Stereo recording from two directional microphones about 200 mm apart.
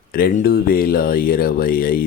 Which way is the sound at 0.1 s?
45° left (ahead or behind).